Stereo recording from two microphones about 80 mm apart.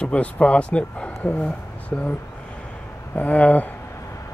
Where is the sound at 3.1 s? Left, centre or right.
Centre.